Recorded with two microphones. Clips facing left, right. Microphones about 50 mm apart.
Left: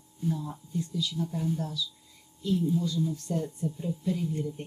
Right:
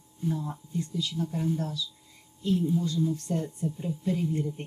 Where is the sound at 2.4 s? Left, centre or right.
Right.